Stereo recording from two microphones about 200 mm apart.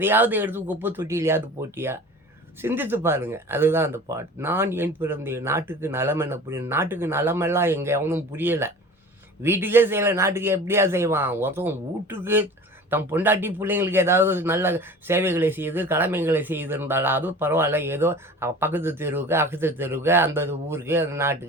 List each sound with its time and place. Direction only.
0.0 s speech: 10° right (ahead or behind)